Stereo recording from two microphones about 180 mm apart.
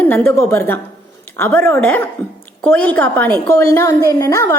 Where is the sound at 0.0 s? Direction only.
10° left (ahead or behind).